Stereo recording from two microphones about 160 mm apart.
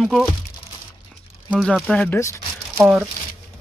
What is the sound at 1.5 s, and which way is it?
Speech, 5° left (ahead or behind).